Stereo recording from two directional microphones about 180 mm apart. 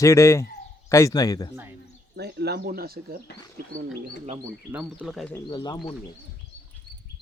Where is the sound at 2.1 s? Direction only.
65° right (ahead or behind).